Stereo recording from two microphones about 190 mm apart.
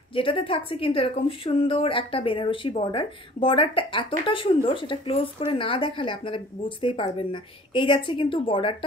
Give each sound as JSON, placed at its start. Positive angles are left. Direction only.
{"t": 0.1, "sound": "a woman's voice", "side_deg": 30}